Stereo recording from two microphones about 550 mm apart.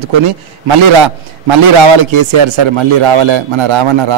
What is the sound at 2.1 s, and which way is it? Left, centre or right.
A man's voice, right.